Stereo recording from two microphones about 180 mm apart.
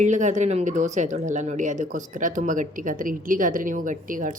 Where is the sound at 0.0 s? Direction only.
40° right (ahead or behind).